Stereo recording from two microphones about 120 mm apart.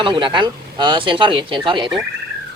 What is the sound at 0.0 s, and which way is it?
Speech, 40° right (ahead or behind).